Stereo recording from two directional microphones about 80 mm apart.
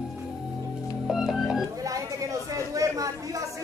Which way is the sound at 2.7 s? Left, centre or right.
Right.